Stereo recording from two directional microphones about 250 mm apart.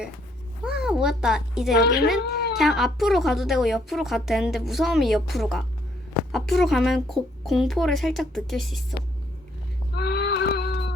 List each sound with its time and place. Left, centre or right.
0.6 s a child's voice: centre
1.7 s a woman's voice: left
2.6 s a woman's voice: centre
9.9 s a sound: left